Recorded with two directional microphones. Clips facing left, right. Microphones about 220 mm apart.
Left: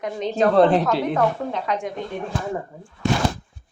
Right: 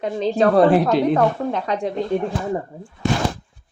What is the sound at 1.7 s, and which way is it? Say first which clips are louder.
Speech: right 3 dB; 30° right (ahead or behind).